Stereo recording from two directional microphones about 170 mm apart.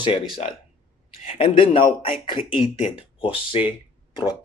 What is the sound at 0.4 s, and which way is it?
Speech, 40° left (ahead or behind).